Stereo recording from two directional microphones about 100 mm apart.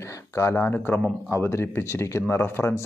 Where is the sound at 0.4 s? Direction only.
25° left (ahead or behind).